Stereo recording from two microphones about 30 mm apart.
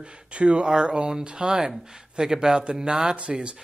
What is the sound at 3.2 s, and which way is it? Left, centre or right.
Speech, right.